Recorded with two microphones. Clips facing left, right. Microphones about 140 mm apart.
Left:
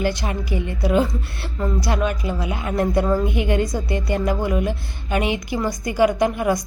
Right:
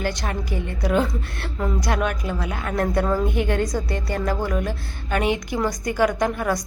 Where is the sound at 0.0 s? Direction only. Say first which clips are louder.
Left 3 dB; 10° left (ahead or behind).